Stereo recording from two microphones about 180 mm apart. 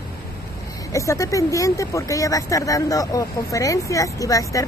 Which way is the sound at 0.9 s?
15° left (ahead or behind).